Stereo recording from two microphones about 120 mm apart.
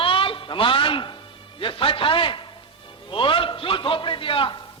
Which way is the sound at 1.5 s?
45° left (ahead or behind).